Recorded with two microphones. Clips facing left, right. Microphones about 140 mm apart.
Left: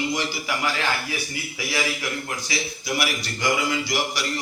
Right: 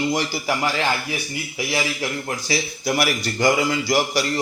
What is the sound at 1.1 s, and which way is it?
A man's voice, 25° right (ahead or behind).